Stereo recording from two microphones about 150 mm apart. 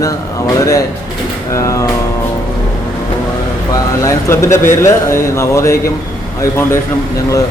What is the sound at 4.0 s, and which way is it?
Speech, 20° left (ahead or behind).